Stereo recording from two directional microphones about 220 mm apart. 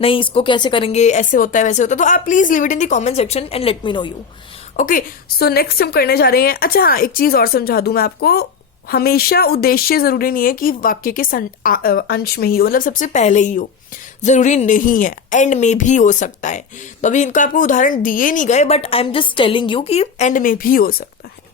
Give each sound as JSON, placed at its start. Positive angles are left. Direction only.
{"t": 0.0, "sound": "speech", "side_deg": 25}
{"t": 4.8, "sound": "speech", "side_deg": 40}